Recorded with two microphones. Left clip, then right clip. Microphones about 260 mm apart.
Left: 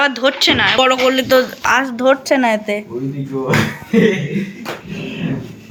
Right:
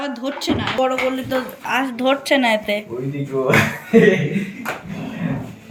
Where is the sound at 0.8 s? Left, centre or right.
Left.